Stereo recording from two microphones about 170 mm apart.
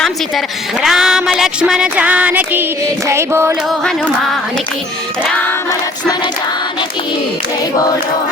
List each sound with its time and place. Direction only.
0.0 s speech: centre (ahead or behind)
3.1 s music: 15° right (ahead or behind)